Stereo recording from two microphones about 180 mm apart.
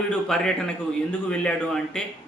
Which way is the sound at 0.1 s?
5° left (ahead or behind).